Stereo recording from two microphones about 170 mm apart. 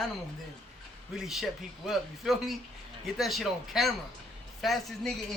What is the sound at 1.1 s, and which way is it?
Speech, centre (ahead or behind).